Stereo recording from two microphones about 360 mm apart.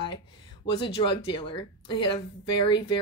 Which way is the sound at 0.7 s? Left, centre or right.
Centre.